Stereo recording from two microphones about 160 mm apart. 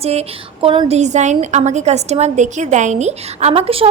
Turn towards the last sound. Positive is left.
turn(degrees=-35)  # may be behind; listen again after turning